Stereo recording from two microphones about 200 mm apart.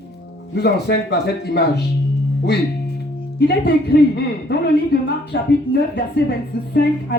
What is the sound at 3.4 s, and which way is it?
Speech, 55° left (ahead or behind).